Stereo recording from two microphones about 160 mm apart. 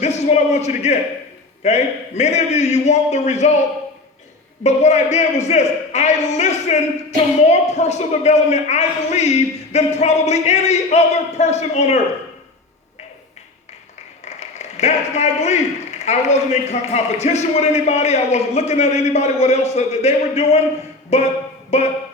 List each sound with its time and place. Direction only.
0.0 s a man's voice: 45° left (ahead or behind)
4.6 s a man's voice: 45° left (ahead or behind)
14.3 s a man's voice: 45° left (ahead or behind)